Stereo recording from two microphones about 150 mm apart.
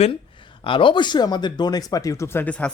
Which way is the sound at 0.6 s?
35° left (ahead or behind).